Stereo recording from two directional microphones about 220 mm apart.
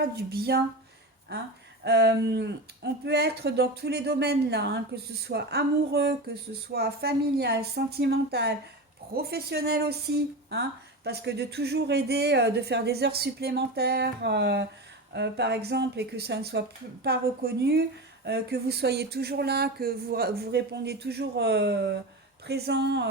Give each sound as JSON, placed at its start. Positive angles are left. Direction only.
{"t": 0.0, "sound": "speech", "side_deg": -45}
{"t": 1.8, "sound": "speech", "side_deg": -50}